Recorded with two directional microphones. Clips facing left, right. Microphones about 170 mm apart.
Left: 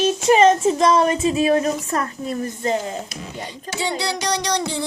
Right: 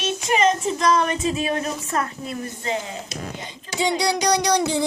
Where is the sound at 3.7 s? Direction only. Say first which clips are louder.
Right 3 dB; 15° right (ahead or behind).